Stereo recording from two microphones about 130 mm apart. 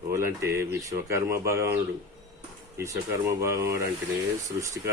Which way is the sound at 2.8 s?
25° right (ahead or behind).